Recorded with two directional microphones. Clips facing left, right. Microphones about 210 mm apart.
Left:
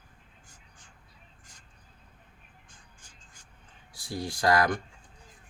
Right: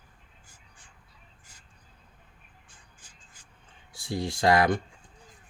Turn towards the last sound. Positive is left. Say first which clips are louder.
# right 3 dB
turn(degrees=-25)  # may be behind; listen again after turning